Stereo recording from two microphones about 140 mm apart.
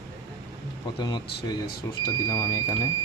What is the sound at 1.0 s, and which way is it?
Speech, 30° left (ahead or behind).